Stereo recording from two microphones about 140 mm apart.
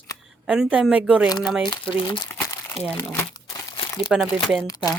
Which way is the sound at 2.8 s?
10° left (ahead or behind).